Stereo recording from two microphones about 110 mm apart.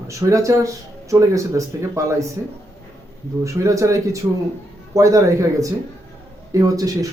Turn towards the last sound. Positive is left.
turn(degrees=-35)  # may be behind; listen again after turning